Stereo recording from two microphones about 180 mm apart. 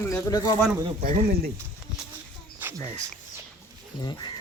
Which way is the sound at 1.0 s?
55° right (ahead or behind).